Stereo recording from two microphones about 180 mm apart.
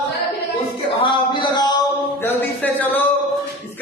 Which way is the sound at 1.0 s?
25° left (ahead or behind).